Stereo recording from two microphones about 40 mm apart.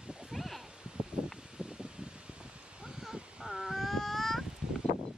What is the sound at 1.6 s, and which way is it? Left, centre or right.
Rustling leaves, right.